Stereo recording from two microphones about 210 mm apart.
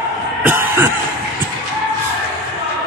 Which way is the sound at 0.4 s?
10° right (ahead or behind).